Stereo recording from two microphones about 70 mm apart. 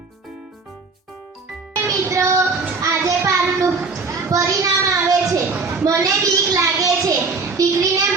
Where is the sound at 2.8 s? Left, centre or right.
Right.